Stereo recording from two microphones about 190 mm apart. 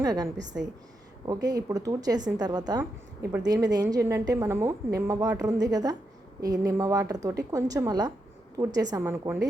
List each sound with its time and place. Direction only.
0.0 s a woman's voice: 20° right (ahead or behind)